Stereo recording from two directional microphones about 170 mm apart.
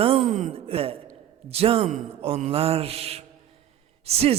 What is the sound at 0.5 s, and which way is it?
A man's voice, 35° right (ahead or behind).